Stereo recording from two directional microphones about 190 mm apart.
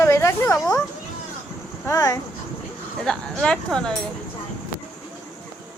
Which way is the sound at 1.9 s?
15° left (ahead or behind).